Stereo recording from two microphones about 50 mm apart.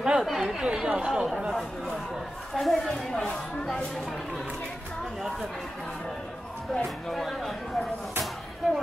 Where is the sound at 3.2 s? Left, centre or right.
Centre.